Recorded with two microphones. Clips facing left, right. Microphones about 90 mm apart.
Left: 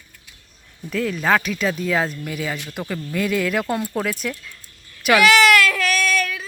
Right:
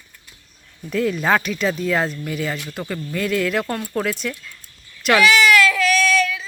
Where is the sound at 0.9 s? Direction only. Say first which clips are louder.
Right 1 dB; centre (ahead or behind).